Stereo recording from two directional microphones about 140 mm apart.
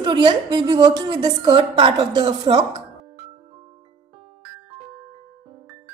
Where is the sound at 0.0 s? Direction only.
35° right (ahead or behind).